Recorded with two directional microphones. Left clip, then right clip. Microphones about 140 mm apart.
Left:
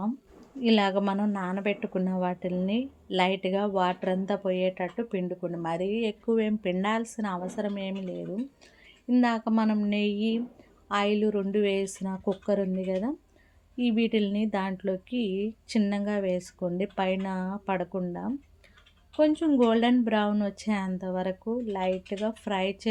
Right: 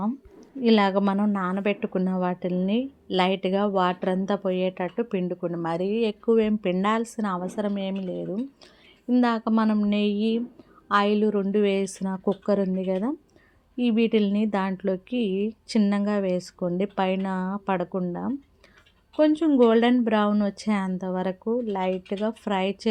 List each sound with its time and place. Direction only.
0.0 s a woman's voice: 30° right (ahead or behind)